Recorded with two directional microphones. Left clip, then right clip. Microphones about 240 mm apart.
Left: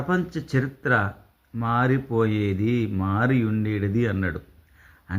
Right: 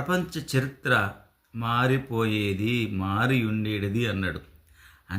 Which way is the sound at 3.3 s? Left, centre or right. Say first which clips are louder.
Left 2 dB; right.